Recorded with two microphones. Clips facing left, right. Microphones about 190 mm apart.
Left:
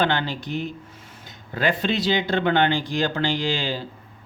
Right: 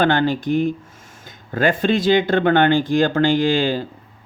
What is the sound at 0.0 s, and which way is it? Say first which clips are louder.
Speech: right 6 dB; 50° right (ahead or behind).